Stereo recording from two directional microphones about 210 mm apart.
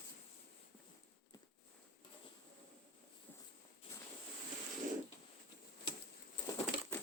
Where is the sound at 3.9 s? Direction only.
10° left (ahead or behind).